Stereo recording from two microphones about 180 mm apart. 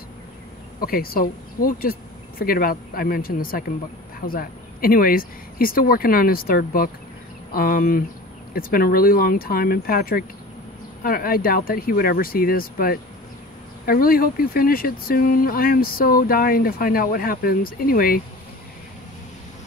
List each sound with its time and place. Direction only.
0.7 s speech: 55° left (ahead or behind)